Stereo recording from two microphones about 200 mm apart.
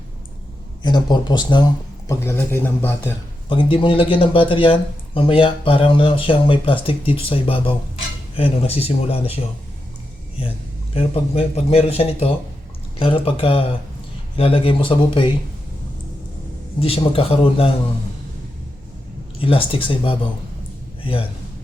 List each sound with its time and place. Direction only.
0.8 s speech: 20° left (ahead or behind)
3.5 s speech: 25° left (ahead or behind)
10.9 s speech: 30° left (ahead or behind)
16.8 s speech: 30° left (ahead or behind)
19.4 s a man's voice: 25° left (ahead or behind)